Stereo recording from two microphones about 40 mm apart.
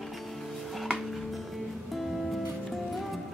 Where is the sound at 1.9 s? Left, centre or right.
Centre.